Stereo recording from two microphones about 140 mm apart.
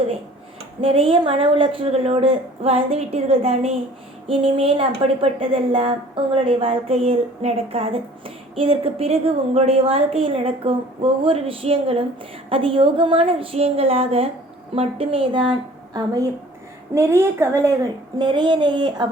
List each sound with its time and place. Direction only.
0.8 s a woman's voice: 40° right (ahead or behind)
16.9 s a woman's voice: 20° right (ahead or behind)
18.2 s a woman's voice: 35° right (ahead or behind)